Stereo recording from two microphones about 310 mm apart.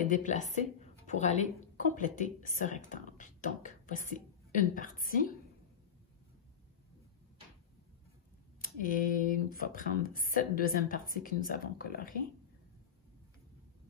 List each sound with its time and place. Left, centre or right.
0.0 s speech: left
8.5 s speech: left